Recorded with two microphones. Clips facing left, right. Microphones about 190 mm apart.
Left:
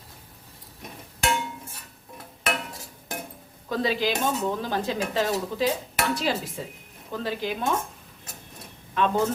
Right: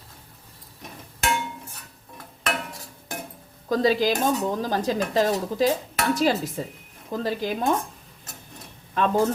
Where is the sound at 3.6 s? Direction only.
40° right (ahead or behind).